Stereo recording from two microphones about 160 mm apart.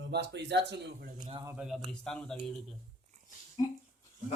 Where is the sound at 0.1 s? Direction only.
90° right.